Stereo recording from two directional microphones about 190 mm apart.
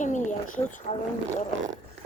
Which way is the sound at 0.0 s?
40° left (ahead or behind).